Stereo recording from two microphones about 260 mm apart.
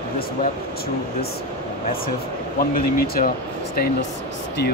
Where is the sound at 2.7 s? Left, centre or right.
Left.